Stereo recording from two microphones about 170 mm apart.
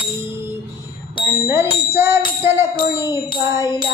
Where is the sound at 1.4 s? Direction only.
15° right (ahead or behind).